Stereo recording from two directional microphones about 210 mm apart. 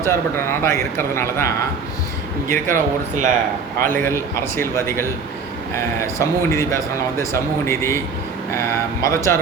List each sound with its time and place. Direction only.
0.0 s a man's voice: 10° left (ahead or behind)
2.6 s speech: 40° right (ahead or behind)
3.8 s a man's voice: 10° left (ahead or behind)
9.0 s a man's voice: 15° left (ahead or behind)